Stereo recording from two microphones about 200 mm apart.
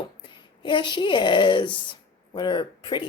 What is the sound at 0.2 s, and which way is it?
A woman's voice, 25° left (ahead or behind).